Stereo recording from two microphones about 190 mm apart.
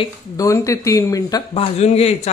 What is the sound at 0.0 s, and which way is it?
Speech, 15° left (ahead or behind).